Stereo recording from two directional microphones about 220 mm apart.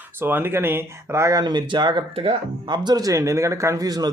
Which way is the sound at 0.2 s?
10° right (ahead or behind).